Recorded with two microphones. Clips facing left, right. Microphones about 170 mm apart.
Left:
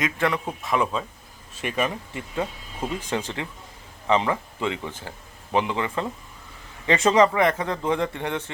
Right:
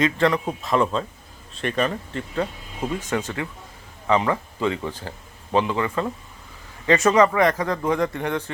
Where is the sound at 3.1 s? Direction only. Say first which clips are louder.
Right 2 dB; 25° left (ahead or behind).